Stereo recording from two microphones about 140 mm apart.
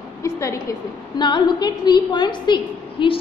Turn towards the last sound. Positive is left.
turn(degrees=35)  # may be behind; listen again after turning